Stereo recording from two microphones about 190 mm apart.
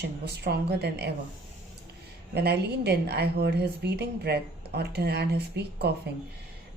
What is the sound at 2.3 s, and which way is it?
A woman's voice, 60° right (ahead or behind).